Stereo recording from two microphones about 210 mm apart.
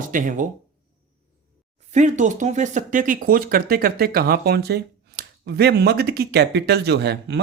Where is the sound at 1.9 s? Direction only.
35° right (ahead or behind).